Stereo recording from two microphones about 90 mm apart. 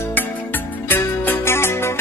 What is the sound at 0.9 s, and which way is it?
Music, 25° left (ahead or behind).